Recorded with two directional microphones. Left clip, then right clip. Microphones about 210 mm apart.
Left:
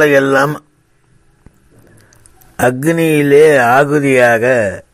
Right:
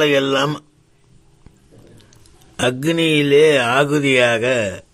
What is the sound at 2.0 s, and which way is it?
Speech, 20° left (ahead or behind).